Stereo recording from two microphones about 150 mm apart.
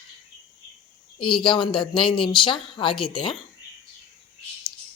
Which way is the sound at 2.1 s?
35° left (ahead or behind).